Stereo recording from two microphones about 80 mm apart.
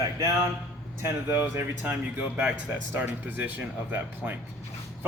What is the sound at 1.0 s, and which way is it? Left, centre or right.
A man's voice, right.